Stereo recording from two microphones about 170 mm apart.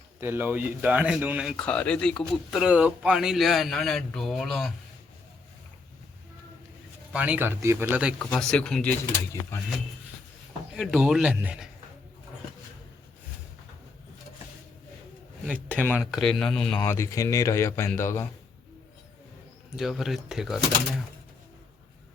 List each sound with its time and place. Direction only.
0.2 s speech: 10° right (ahead or behind)
1.6 s speech: 5° left (ahead or behind)
7.1 s speech: 10° right (ahead or behind)
8.2 s speech: 5° left (ahead or behind)
10.8 s speech: centre (ahead or behind)
15.4 s speech: 10° right (ahead or behind)
16.8 s speech: 15° left (ahead or behind)
19.7 s speech: centre (ahead or behind)